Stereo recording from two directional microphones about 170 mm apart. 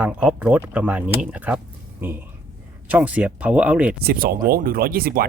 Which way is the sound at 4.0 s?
60° right (ahead or behind).